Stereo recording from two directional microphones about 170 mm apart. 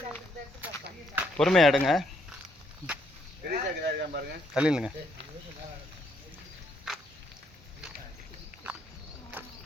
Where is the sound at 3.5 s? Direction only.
60° right (ahead or behind).